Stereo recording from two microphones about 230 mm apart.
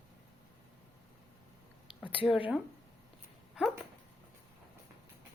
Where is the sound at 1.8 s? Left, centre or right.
Left.